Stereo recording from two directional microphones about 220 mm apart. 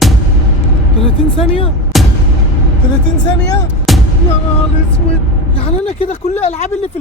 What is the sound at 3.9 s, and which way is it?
Music, centre (ahead or behind).